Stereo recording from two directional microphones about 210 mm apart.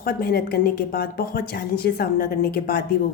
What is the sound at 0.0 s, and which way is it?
Speech, 45° left (ahead or behind).